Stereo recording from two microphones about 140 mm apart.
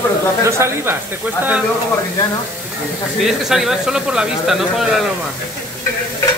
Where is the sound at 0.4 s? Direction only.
20° right (ahead or behind).